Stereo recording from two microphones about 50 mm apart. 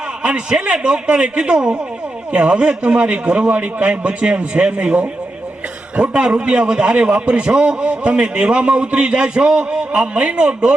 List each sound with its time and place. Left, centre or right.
0.2 s a man's voice: centre